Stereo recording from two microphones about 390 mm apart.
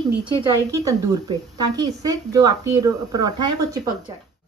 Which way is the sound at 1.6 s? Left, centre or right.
Centre.